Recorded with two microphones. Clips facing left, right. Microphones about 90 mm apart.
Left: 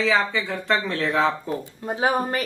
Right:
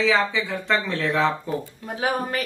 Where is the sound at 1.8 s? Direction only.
25° left (ahead or behind).